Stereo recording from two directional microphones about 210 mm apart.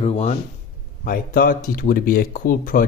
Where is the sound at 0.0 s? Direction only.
30° left (ahead or behind).